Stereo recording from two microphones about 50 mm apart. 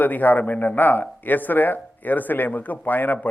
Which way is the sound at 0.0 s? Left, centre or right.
Left.